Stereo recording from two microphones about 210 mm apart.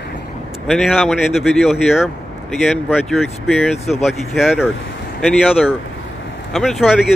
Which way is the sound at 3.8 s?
30° left (ahead or behind).